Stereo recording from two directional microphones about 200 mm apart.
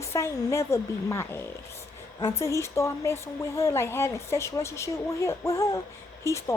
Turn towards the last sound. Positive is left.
turn(degrees=15)  # may be behind; listen again after turning